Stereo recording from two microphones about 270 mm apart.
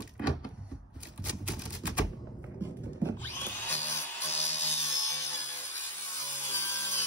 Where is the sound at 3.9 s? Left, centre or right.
Left.